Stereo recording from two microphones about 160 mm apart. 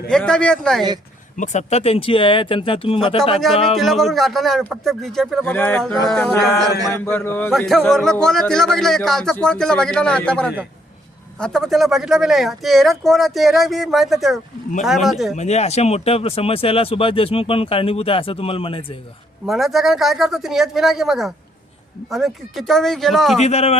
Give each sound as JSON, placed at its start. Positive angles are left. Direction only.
{"t": 0.1, "sound": "speech", "side_deg": 5}
{"t": 1.4, "sound": "speech", "side_deg": 45}
{"t": 3.4, "sound": "speech", "side_deg": 0}
{"t": 6.6, "sound": "chant", "side_deg": -25}
{"t": 7.0, "sound": "a man's voice", "side_deg": 15}
{"t": 15.4, "sound": "speech", "side_deg": 45}
{"t": 19.5, "sound": "speech", "side_deg": 0}
{"t": 23.4, "sound": "a man's voice", "side_deg": 40}